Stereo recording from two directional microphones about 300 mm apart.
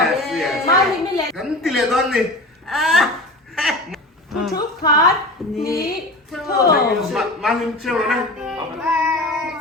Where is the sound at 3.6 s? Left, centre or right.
Centre.